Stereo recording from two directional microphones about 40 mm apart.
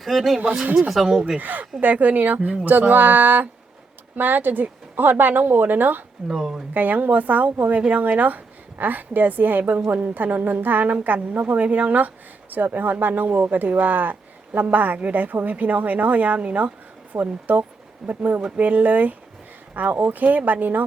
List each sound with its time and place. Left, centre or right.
0.0 s speech: centre
1.4 s speech: right
6.3 s speech: centre
6.7 s speech: right